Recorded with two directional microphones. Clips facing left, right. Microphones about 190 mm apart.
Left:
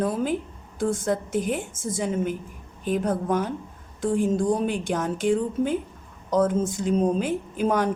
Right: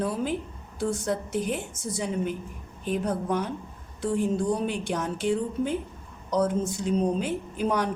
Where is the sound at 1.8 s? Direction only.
90° left.